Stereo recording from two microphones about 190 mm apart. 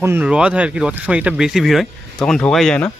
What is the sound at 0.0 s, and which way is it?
Speech, 10° right (ahead or behind).